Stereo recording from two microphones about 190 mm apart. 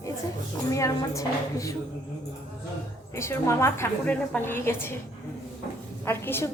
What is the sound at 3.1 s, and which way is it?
A woman's voice, 15° left (ahead or behind).